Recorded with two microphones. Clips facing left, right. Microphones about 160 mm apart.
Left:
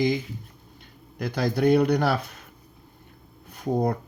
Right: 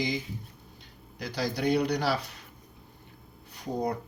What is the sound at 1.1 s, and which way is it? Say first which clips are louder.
Speech: left 6 dB; 55° left (ahead or behind).